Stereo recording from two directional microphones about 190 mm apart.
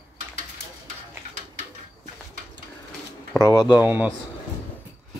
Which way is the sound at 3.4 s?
20° left (ahead or behind).